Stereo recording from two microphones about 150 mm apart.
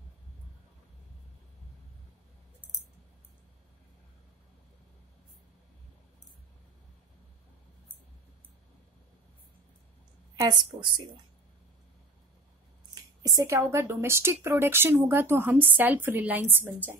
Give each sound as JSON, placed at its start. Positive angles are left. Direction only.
{"t": 10.7, "sound": "speech", "side_deg": -35}
{"t": 13.2, "sound": "a woman's voice", "side_deg": -20}